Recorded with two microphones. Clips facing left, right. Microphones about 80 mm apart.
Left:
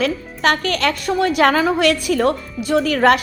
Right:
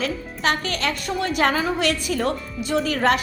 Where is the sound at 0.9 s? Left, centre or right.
Left.